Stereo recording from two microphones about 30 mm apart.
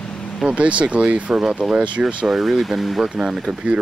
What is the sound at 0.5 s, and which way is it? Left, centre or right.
Speech, right.